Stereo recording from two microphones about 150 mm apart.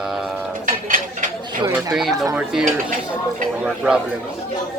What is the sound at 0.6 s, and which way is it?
Dishes, 60° right (ahead or behind).